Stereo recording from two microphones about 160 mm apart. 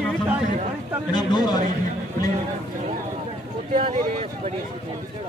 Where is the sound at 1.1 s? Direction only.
25° left (ahead or behind).